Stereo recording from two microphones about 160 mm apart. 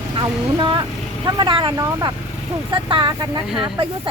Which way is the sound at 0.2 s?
30° right (ahead or behind).